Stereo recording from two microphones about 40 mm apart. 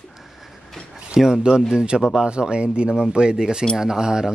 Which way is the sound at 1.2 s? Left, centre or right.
Centre.